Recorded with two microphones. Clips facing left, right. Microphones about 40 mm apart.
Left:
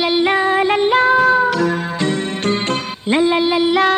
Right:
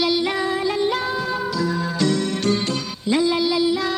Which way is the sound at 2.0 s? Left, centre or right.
Left.